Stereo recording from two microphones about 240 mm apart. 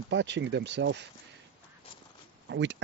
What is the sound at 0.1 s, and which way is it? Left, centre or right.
Speech, right.